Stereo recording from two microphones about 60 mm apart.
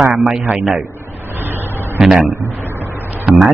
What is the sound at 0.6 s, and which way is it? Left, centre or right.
Speech, centre.